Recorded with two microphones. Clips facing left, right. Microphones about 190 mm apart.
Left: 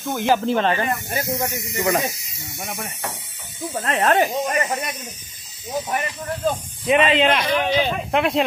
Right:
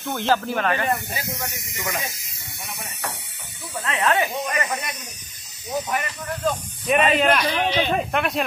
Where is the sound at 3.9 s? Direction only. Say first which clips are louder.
Left 4 dB; 35° left (ahead or behind).